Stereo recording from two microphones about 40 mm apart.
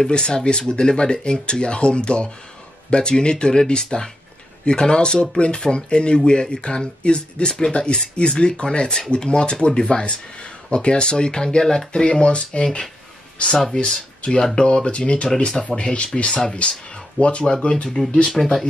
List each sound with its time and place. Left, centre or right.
0.0 s speech: centre
12.6 s speech: centre
13.7 s speech: left
15.2 s speech: centre
15.7 s speech: left